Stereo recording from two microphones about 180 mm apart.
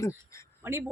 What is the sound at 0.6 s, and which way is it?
Speech, 15° right (ahead or behind).